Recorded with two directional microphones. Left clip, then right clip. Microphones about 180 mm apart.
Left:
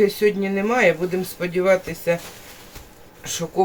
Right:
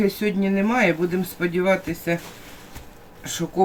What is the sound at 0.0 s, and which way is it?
Speech, 10° left (ahead or behind).